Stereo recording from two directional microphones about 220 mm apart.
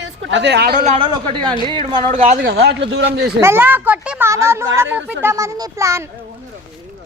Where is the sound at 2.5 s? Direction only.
50° right (ahead or behind).